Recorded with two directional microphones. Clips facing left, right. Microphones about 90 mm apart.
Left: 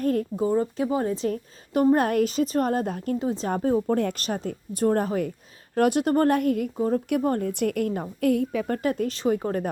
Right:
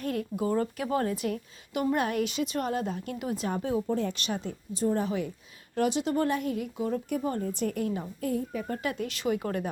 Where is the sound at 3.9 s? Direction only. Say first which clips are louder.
Left 5 dB; 60° left (ahead or behind).